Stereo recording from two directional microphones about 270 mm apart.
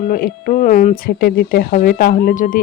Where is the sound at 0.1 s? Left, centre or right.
Left.